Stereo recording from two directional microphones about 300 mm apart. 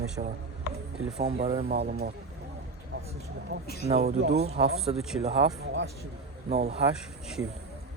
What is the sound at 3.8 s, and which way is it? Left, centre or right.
Speech, right.